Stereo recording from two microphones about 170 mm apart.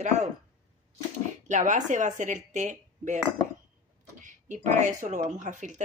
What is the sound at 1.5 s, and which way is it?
Speech, 45° right (ahead or behind).